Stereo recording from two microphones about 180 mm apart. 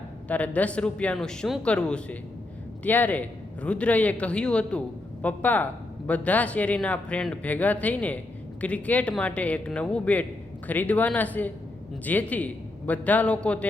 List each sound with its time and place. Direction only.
0.3 s speech: 10° left (ahead or behind)